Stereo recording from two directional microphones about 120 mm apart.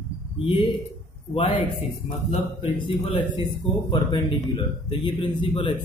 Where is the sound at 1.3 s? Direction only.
45° left (ahead or behind).